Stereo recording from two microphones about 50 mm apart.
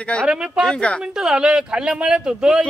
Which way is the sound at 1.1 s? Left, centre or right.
Centre.